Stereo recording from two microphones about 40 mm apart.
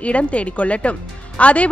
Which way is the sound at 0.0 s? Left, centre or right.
Left.